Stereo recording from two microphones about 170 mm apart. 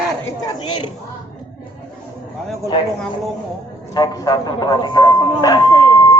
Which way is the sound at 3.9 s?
25° left (ahead or behind).